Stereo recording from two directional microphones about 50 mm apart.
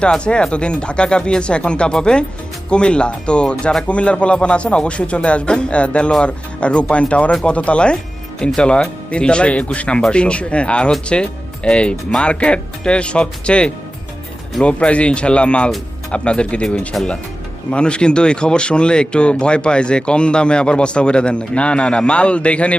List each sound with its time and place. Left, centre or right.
0.0 s speech: centre
16.9 s speech: centre